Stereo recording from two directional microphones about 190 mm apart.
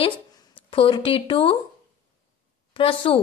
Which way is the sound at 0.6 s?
25° left (ahead or behind).